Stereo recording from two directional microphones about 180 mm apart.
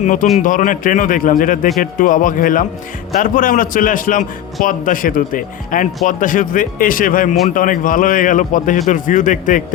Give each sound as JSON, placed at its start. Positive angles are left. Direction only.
{"t": 0.0, "sound": "speech", "side_deg": 45}